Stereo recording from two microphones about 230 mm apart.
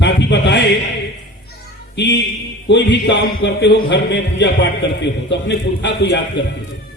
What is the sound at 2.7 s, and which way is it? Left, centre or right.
Speech, left.